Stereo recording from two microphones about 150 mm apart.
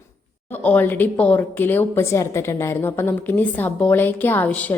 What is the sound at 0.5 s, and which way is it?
A woman's voice, 10° left (ahead or behind).